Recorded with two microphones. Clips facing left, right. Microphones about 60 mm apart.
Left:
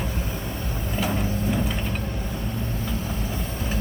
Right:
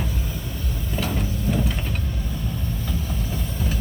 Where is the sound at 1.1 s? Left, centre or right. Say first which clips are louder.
Right 1 dB; left.